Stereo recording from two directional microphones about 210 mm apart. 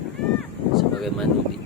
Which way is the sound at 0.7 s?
Centre (ahead or behind).